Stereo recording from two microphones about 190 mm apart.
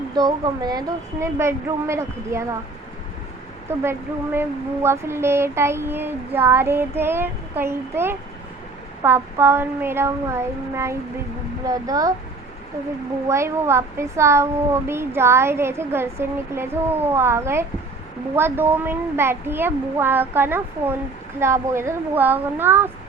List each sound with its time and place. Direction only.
0.1 s speech: 20° right (ahead or behind)
3.7 s speech: 10° right (ahead or behind)
13.2 s speech: 15° right (ahead or behind)